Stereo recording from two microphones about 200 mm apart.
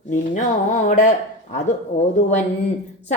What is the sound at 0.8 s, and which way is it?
Speech, 40° left (ahead or behind).